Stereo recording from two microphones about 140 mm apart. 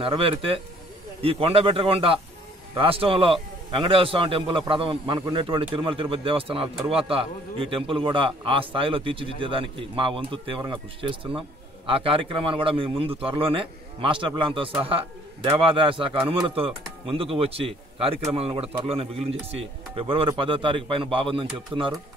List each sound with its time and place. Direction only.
0.0 s a man's voice: 40° right (ahead or behind)